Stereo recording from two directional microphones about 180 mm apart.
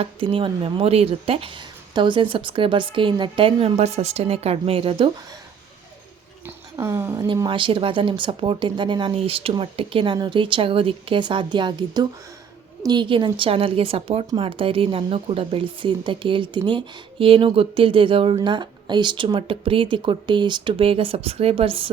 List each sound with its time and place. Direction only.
0.0 s speech: 30° right (ahead or behind)
6.7 s speech: 15° right (ahead or behind); by 21.8 s 30° right (ahead or behind)